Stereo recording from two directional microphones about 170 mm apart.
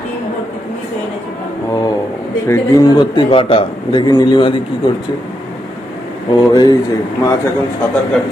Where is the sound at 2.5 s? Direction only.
20° left (ahead or behind).